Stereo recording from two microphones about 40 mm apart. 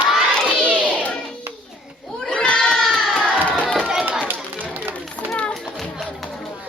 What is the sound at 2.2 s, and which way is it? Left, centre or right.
Crowd, left.